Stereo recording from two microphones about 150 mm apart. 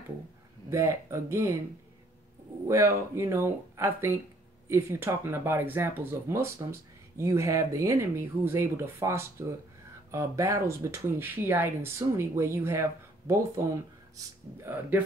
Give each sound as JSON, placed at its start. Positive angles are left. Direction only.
{"t": 0.7, "sound": "speech", "side_deg": -20}
{"t": 2.7, "sound": "speech", "side_deg": -20}